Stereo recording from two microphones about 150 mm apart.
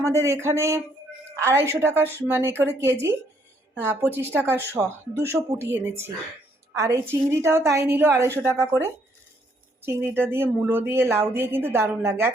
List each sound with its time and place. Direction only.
0.0 s a woman's voice: 20° right (ahead or behind)